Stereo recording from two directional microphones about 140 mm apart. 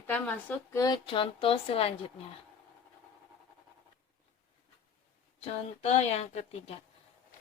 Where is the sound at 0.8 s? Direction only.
30° left (ahead or behind).